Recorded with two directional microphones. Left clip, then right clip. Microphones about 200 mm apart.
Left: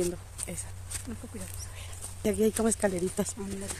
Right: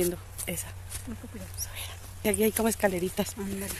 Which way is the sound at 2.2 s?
5° left (ahead or behind).